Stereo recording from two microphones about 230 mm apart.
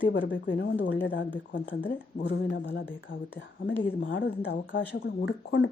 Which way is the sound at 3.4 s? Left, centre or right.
Left.